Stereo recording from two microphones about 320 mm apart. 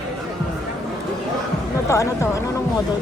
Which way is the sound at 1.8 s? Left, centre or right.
Centre.